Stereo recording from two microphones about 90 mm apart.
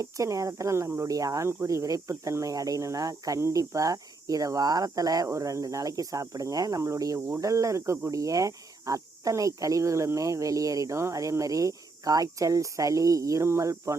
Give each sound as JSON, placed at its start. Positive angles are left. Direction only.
{"t": 0.0, "sound": "speech", "side_deg": -35}